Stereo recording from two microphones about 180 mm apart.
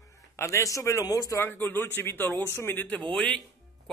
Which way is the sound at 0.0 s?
15° left (ahead or behind).